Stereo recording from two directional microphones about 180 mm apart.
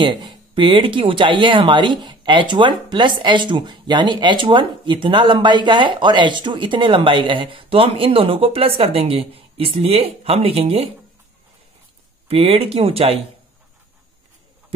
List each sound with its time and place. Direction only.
0.0 s speech: 25° right (ahead or behind)
12.3 s speech: 30° right (ahead or behind)